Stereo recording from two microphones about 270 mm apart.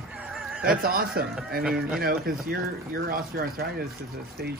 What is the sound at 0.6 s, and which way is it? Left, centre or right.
Speech, right.